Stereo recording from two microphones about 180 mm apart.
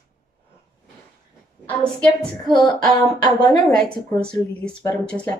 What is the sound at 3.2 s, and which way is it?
Speech, 20° left (ahead or behind).